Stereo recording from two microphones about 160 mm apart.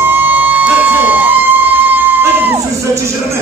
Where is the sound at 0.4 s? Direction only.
10° right (ahead or behind).